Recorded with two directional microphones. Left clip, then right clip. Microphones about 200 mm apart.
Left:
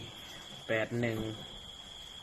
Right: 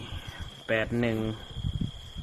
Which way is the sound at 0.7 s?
25° right (ahead or behind).